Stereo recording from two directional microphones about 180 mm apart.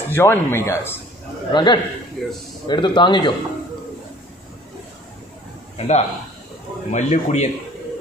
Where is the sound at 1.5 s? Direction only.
25° left (ahead or behind).